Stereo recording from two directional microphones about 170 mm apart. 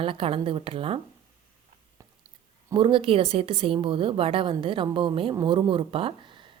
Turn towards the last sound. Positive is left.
turn(degrees=-30)  # may be behind; listen again after turning